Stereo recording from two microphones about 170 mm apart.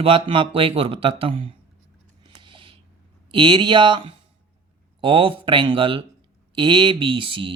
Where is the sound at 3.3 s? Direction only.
25° right (ahead or behind).